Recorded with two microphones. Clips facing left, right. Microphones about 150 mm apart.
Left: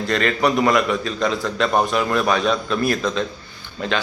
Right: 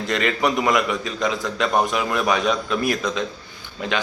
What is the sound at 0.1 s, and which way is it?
A man's voice, 15° right (ahead or behind).